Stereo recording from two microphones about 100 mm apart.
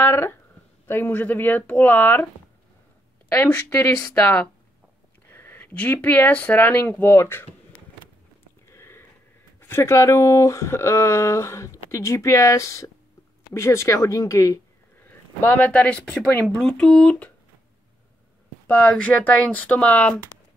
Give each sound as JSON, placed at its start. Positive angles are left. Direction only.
{"t": 0.0, "sound": "speech", "side_deg": 25}
{"t": 3.3, "sound": "speech", "side_deg": 20}
{"t": 3.9, "sound": "speech", "side_deg": 10}
{"t": 8.6, "sound": "a sound", "side_deg": 25}
{"t": 9.6, "sound": "speech", "side_deg": 25}
{"t": 15.0, "sound": "speech", "side_deg": 20}
{"t": 18.7, "sound": "speech", "side_deg": 15}